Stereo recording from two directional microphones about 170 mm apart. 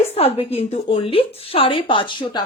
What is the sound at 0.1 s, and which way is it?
A woman's voice, 35° left (ahead or behind).